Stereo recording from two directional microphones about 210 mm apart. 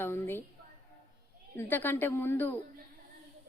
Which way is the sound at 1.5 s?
10° left (ahead or behind).